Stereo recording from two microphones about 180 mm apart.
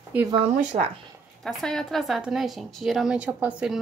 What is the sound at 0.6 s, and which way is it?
Speech, 45° right (ahead or behind).